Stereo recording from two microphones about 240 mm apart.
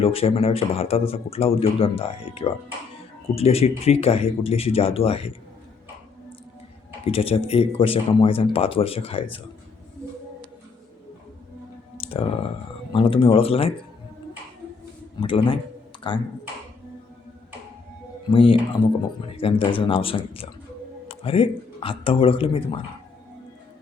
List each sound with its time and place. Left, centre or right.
0.0 s speech: left
7.0 s speech: left
11.9 s speech: left
15.2 s speech: left
18.3 s speech: left